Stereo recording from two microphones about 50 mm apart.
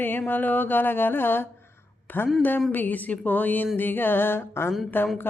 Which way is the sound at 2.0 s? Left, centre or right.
Left.